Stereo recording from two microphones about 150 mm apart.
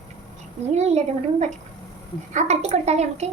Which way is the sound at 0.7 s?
50° right (ahead or behind).